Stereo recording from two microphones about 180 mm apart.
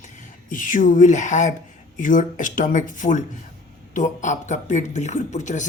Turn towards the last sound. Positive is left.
turn(degrees=40)  # may be behind; listen again after turning